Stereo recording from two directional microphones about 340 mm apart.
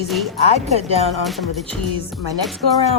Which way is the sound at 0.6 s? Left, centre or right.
Centre.